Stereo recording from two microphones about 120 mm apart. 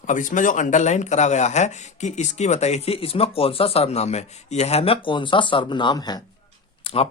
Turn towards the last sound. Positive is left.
turn(degrees=50)  # may be behind; listen again after turning